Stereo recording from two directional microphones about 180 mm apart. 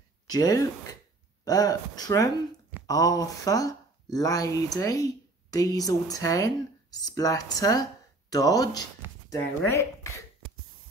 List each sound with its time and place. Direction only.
0.3 s speech: 20° left (ahead or behind)